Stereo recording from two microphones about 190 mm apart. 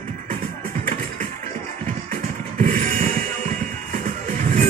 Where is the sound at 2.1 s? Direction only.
45° right (ahead or behind).